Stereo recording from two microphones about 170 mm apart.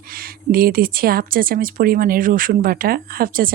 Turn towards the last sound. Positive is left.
turn(degrees=-60)  # may be behind; listen again after turning